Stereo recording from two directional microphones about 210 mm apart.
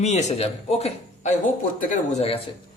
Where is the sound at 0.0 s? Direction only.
35° left (ahead or behind).